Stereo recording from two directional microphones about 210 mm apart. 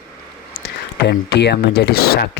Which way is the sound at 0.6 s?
50° left (ahead or behind).